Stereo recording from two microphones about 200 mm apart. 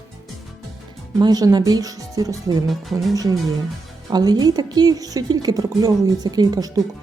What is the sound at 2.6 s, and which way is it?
Speech, centre (ahead or behind).